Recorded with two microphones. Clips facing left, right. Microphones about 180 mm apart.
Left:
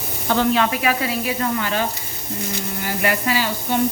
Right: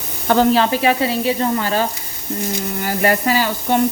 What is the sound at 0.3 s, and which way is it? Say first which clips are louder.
Speech: right 4 dB; 40° right (ahead or behind).